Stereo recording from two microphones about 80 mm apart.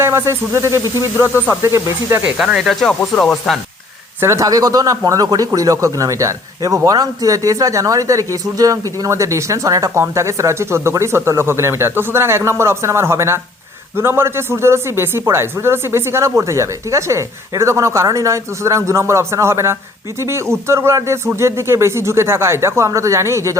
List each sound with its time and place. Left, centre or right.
0.0 s speech: right
2.2 s speech: centre
4.2 s speech: right